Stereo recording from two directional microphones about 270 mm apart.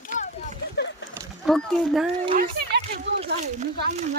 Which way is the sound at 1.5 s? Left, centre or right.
Centre.